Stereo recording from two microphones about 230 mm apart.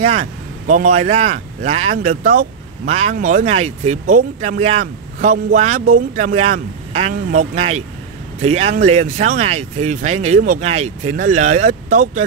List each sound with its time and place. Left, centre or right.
0.0 s speech: right